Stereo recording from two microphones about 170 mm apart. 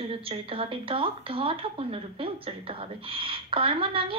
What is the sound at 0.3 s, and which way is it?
A woman's voice, 30° right (ahead or behind).